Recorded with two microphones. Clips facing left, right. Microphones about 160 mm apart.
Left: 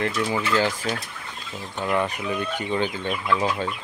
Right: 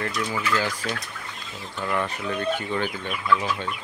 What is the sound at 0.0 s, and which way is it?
Speech, 25° left (ahead or behind).